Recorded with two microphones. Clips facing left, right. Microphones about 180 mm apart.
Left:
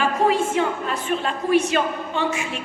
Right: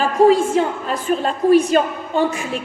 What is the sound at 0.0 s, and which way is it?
A woman's voice, 35° right (ahead or behind).